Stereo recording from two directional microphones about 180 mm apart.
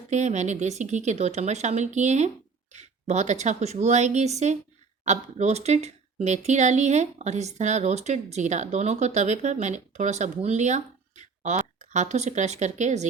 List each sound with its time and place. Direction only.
0.1 s speech: 40° right (ahead or behind)